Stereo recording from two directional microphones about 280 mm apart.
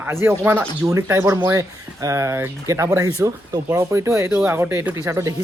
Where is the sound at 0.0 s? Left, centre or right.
Centre.